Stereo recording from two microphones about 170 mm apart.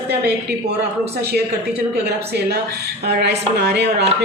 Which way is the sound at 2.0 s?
75° right (ahead or behind).